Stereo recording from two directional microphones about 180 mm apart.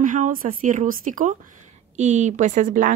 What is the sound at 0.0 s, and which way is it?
A woman's voice, 45° right (ahead or behind).